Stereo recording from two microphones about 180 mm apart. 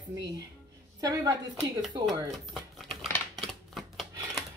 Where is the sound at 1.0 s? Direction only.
20° right (ahead or behind).